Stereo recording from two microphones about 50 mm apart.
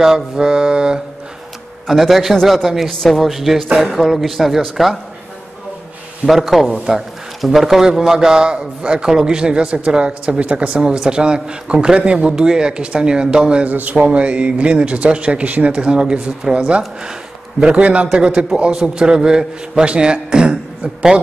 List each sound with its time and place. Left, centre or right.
0.0 s a man's voice: centre
1.9 s a man's voice: centre
2.9 s speech: centre
3.2 s a man's voice: centre
6.2 s a man's voice: centre
13.7 s a man's voice: right
14.0 s a man's voice: right